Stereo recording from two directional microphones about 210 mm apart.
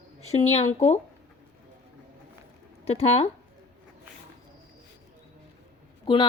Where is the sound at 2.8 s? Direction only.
30° left (ahead or behind).